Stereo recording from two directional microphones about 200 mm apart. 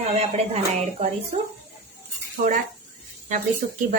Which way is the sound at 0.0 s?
30° right (ahead or behind).